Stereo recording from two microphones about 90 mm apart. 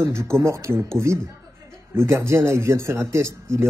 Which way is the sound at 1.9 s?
30° right (ahead or behind).